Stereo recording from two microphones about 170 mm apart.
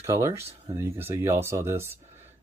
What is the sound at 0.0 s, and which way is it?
Speech, 15° right (ahead or behind).